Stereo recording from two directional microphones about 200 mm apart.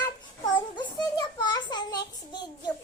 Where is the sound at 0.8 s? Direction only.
20° left (ahead or behind).